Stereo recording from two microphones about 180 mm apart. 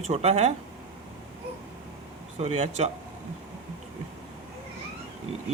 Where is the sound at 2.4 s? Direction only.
35° right (ahead or behind).